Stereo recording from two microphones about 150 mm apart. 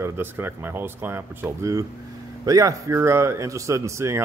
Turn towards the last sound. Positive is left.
turn(degrees=-20)  # may be behind; listen again after turning